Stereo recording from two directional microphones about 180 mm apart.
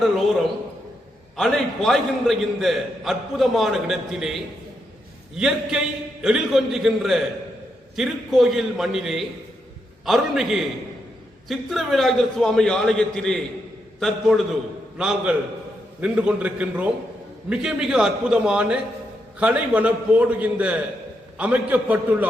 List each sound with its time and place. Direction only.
1.4 s a man's voice: 5° left (ahead or behind)
5.4 s a man's voice: 5° right (ahead or behind)